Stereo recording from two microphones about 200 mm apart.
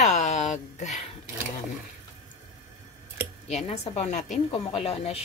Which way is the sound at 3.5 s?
30° left (ahead or behind).